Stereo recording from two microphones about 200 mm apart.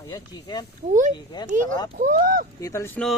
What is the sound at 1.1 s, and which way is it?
Speech, 20° left (ahead or behind).